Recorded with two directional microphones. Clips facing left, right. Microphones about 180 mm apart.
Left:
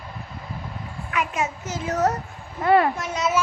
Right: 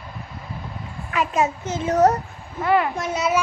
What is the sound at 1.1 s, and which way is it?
A child's voice, 35° right (ahead or behind).